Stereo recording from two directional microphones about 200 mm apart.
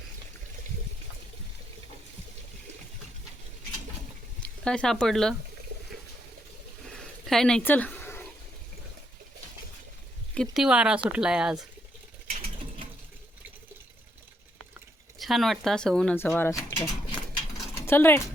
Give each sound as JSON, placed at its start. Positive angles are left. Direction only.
{"t": 4.4, "sound": "speech", "side_deg": 5}
{"t": 6.8, "sound": "a sound", "side_deg": 0}
{"t": 10.3, "sound": "speech", "side_deg": 0}
{"t": 15.2, "sound": "speech", "side_deg": 0}
{"t": 17.8, "sound": "speech", "side_deg": 10}